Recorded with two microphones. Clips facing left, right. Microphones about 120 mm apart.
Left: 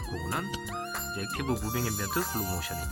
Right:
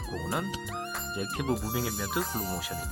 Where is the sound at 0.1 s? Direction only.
Centre (ahead or behind).